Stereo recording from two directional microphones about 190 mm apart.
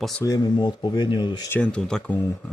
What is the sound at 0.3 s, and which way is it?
Speech, 20° left (ahead or behind).